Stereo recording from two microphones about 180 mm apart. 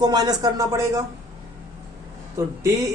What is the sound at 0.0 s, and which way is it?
Speech, 20° right (ahead or behind).